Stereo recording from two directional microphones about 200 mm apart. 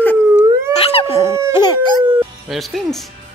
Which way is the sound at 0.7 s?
30° left (ahead or behind).